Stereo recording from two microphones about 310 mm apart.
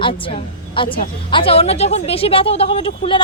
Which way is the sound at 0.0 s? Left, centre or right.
Centre.